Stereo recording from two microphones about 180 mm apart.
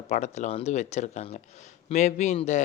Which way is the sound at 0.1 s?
40° left (ahead or behind).